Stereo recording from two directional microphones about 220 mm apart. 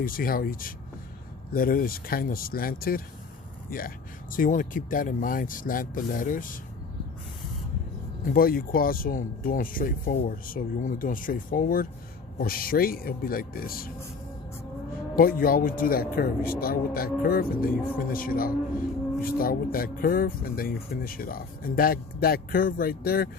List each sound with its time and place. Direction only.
0.0 s speech: 40° left (ahead or behind)
8.3 s speech: 40° left (ahead or behind)
15.1 s speech: 40° left (ahead or behind)